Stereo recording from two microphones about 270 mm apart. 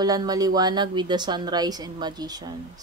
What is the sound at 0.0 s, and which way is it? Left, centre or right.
Speech, centre.